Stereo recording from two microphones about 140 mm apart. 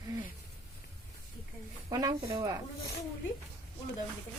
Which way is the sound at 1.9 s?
25° right (ahead or behind).